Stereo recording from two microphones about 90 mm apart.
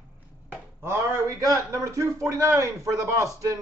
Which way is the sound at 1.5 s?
35° right (ahead or behind).